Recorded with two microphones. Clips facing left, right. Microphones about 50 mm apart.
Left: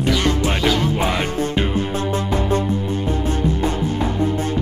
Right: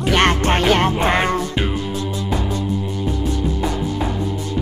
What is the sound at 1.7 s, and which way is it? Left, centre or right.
Music, left.